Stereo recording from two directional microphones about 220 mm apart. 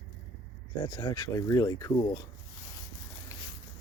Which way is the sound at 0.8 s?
20° left (ahead or behind).